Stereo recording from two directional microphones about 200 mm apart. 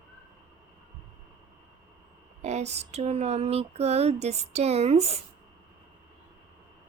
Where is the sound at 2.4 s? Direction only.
35° right (ahead or behind).